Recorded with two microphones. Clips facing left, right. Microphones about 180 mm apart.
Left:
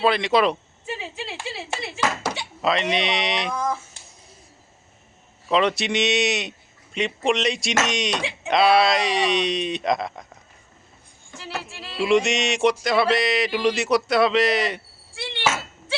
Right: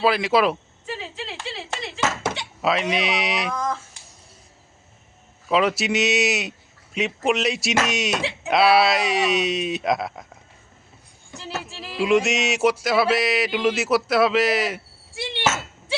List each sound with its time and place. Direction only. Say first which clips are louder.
0.0 s speech: even; 5° right (ahead or behind)
0.9 s a sound: even; 15° left (ahead or behind)
2.6 s speech: even; 5° right (ahead or behind)
3.5 s speech: left 1 dB; 10° left (ahead or behind)
5.5 s speech: even; 5° right (ahead or behind)
11.3 s music: right 1 dB; 20° right (ahead or behind)
11.9 s speech: even; 5° right (ahead or behind)